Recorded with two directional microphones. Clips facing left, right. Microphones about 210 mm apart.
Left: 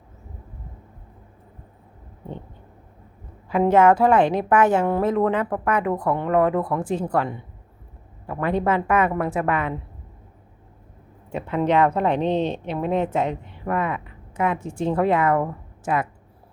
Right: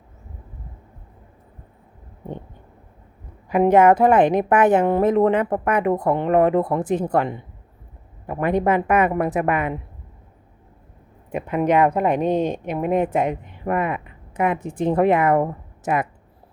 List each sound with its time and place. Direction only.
3.5 s a woman's voice: 15° right (ahead or behind)
11.3 s a woman's voice: 15° right (ahead or behind)